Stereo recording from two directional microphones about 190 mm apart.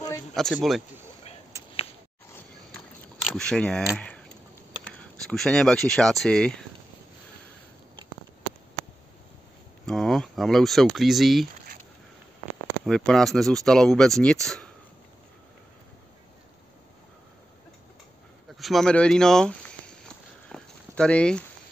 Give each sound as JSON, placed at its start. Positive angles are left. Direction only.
{"t": 0.3, "sound": "speech", "side_deg": 0}
{"t": 1.5, "sound": "a sound", "side_deg": -15}
{"t": 3.3, "sound": "speech", "side_deg": 5}
{"t": 9.8, "sound": "speech", "side_deg": 0}
{"t": 12.6, "sound": "speech", "side_deg": 0}
{"t": 18.6, "sound": "speech", "side_deg": 0}
{"t": 20.4, "sound": "walk", "side_deg": 5}